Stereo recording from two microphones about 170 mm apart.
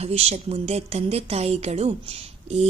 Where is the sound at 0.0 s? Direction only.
35° right (ahead or behind).